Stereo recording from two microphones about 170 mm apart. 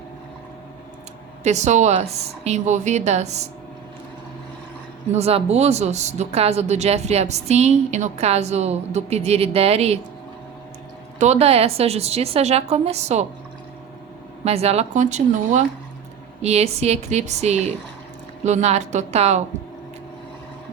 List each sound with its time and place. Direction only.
1.5 s speech: 45° right (ahead or behind)
5.1 s speech: 40° right (ahead or behind)
11.2 s speech: 40° right (ahead or behind)
14.4 s speech: 40° right (ahead or behind)